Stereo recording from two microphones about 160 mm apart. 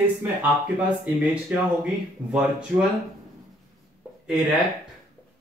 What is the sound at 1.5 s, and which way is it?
Speech, 10° right (ahead or behind).